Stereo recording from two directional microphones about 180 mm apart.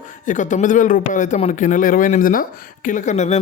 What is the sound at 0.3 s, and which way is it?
A man's voice, 45° left (ahead or behind).